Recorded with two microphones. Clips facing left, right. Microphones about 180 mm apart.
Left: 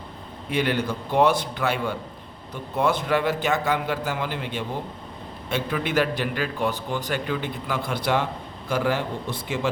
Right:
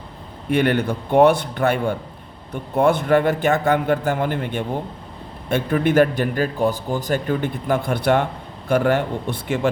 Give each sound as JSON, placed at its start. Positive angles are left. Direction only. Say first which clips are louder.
{"t": 0.5, "sound": "a man's voice", "louder": "right 6 dB", "side_deg": -55}